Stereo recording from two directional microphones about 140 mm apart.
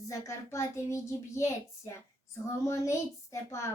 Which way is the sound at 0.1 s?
20° left (ahead or behind).